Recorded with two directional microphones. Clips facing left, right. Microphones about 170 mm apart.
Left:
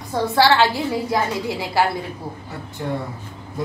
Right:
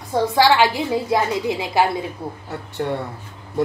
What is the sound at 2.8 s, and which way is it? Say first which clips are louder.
Speech: right 3 dB; 55° right (ahead or behind).